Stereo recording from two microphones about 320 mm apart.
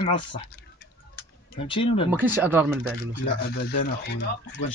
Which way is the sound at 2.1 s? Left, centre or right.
Centre.